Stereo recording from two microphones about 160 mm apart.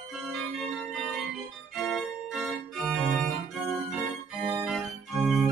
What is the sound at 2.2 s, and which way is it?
Organ, centre (ahead or behind).